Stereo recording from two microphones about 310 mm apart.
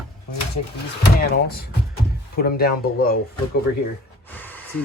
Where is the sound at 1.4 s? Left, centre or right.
Left.